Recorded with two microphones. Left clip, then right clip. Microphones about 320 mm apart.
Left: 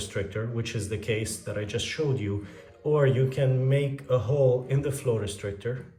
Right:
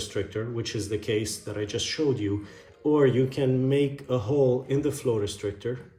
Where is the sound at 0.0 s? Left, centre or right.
Centre.